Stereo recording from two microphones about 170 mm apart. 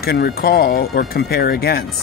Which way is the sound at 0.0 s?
65° left (ahead or behind).